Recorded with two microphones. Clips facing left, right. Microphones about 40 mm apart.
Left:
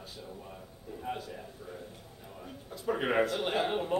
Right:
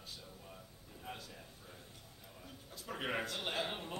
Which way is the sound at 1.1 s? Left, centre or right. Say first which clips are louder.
Left 11 dB; left.